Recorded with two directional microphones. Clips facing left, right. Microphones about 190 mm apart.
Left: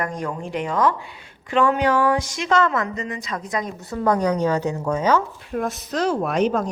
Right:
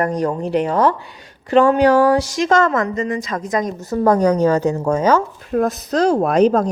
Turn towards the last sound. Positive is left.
turn(degrees=-40)  # may be behind; listen again after turning